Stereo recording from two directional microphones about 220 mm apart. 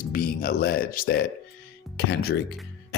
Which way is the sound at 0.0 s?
40° left (ahead or behind).